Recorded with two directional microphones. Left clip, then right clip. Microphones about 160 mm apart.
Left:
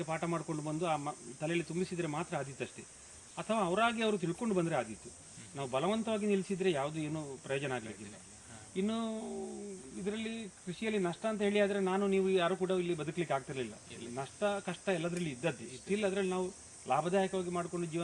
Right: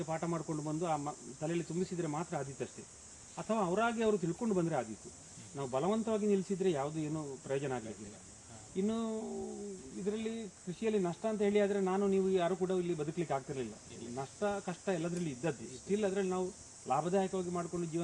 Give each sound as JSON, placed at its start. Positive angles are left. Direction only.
{"t": 0.0, "sound": "speech", "side_deg": 20}